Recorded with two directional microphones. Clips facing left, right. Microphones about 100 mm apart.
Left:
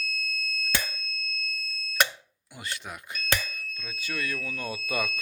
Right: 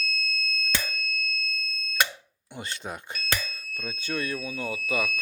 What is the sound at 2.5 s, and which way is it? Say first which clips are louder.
Speech: right 3 dB; 30° right (ahead or behind).